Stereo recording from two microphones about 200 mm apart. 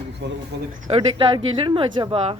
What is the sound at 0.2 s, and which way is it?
Speech, 60° right (ahead or behind).